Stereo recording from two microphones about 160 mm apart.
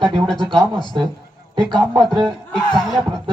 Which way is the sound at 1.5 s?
5° left (ahead or behind).